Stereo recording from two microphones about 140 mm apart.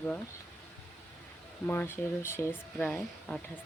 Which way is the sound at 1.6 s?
15° left (ahead or behind).